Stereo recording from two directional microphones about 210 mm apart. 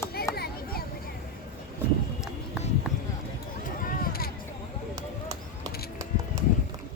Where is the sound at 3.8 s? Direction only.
40° left (ahead or behind).